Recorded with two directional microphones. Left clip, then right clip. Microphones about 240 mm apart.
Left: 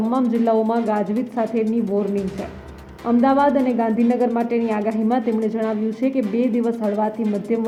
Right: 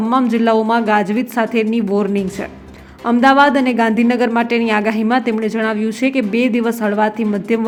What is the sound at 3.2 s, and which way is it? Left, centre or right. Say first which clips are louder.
A woman's voice: right 6 dB; centre.